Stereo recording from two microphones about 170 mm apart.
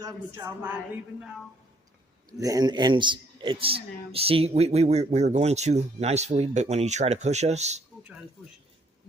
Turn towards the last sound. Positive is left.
turn(degrees=-40)  # may be behind; listen again after turning